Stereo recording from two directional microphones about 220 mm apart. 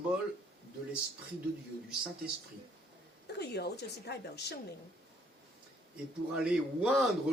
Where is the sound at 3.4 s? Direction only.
50° left (ahead or behind).